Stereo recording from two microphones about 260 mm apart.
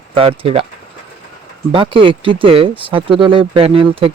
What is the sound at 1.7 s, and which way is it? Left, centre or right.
Speech, centre.